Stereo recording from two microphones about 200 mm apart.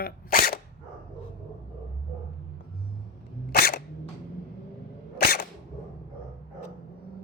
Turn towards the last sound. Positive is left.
turn(degrees=50)  # may be behind; listen again after turning